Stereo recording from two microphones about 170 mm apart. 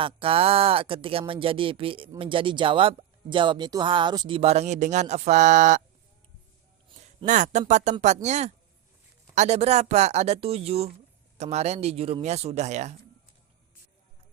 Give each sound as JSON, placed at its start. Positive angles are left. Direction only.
{"t": 0.0, "sound": "speech", "side_deg": -30}
{"t": 7.3, "sound": "speech", "side_deg": -45}